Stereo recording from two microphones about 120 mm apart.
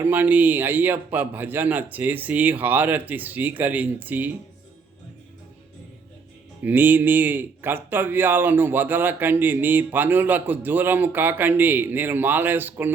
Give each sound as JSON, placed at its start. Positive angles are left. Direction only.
{"t": 0.0, "sound": "speech", "side_deg": -15}
{"t": 6.6, "sound": "speech", "side_deg": -15}